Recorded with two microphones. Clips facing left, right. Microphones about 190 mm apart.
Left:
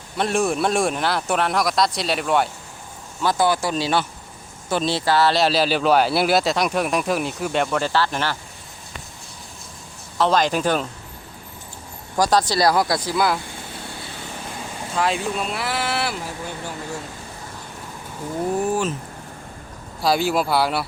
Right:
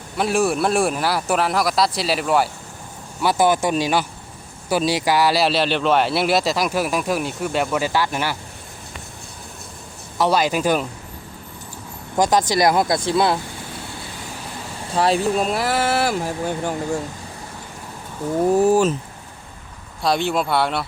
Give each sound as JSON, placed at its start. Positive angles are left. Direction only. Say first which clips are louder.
{"t": 0.2, "sound": "speech", "louder": "right 1 dB", "side_deg": -5}
{"t": 3.2, "sound": "speech", "louder": "right 2 dB", "side_deg": -15}
{"t": 10.2, "sound": "speech", "louder": "even", "side_deg": -10}
{"t": 12.1, "sound": "speech", "louder": "right 1 dB", "side_deg": -20}
{"t": 14.9, "sound": "speech", "louder": "right 5 dB", "side_deg": -35}
{"t": 18.6, "sound": "speech", "louder": "right 8 dB", "side_deg": -40}
{"t": 20.0, "sound": "speech", "louder": "even", "side_deg": 5}